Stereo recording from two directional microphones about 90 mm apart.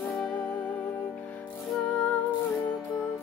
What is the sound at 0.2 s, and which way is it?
Music, 15° left (ahead or behind).